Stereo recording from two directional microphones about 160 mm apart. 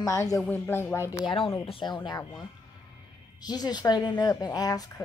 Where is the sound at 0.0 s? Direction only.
20° left (ahead or behind).